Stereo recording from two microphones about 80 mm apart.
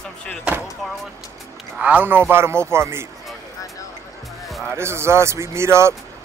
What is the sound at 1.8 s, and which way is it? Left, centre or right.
A man's voice, centre.